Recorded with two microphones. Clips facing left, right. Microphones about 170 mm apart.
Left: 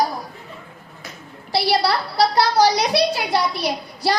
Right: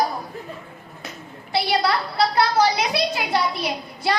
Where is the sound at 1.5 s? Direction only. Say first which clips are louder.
Left 2 dB; 35° left (ahead or behind).